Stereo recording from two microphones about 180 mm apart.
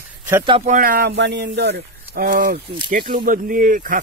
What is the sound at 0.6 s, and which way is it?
Speech, 50° right (ahead or behind).